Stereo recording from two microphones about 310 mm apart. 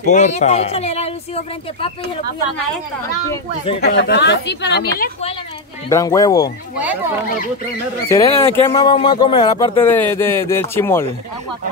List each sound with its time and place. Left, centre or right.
0.1 s speech: left
3.8 s a woman's voice: left
5.9 s speech: centre
8.1 s speech: centre